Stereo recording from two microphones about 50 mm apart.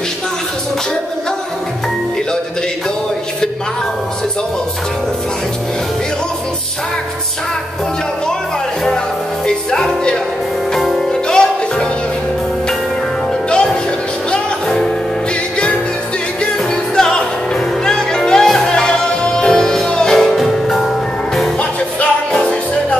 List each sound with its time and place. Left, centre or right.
9.7 s music: centre
10.7 s music: centre
11.1 s music: centre
16.7 s music: centre
22.3 s music: centre